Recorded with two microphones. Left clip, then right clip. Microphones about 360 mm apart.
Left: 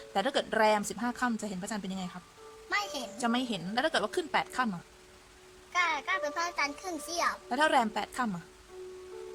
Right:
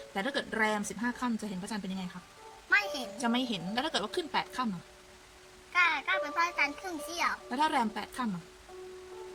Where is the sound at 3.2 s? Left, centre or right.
Centre.